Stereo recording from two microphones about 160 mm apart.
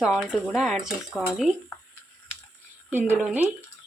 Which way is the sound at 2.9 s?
10° right (ahead or behind).